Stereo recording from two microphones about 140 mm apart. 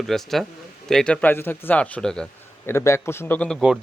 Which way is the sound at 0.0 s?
Centre (ahead or behind).